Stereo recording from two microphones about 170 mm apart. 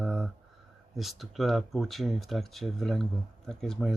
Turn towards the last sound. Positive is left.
turn(degrees=0)  # may be behind; listen again after turning